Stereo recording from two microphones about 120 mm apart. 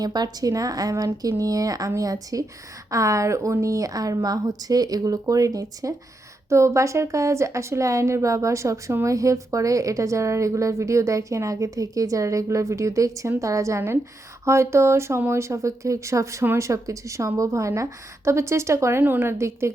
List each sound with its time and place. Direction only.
0.0 s a woman's voice: 35° right (ahead or behind)